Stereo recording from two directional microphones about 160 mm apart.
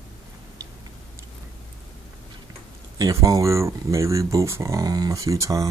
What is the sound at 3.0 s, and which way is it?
Speech, 20° right (ahead or behind).